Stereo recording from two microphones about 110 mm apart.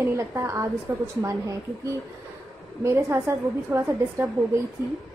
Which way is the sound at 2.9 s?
25° right (ahead or behind).